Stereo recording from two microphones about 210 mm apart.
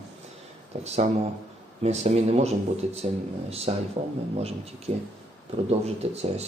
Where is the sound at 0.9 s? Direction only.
30° right (ahead or behind).